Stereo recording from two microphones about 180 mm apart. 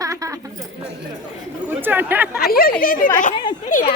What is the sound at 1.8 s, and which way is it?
Speech, 10° right (ahead or behind).